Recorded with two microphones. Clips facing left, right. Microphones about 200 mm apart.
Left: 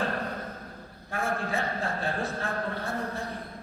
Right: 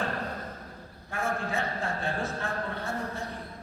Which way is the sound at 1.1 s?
35° left (ahead or behind).